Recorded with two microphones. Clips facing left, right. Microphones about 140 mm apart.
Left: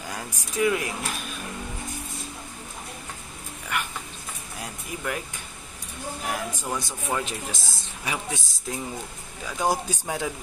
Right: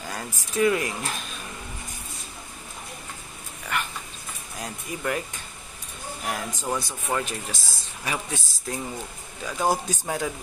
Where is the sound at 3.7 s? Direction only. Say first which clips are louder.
Right 1 dB; 10° left (ahead or behind).